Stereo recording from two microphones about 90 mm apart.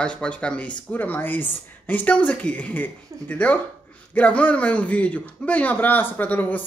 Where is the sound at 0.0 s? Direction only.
15° left (ahead or behind).